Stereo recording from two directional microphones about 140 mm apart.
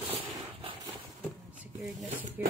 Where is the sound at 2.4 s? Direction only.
10° right (ahead or behind).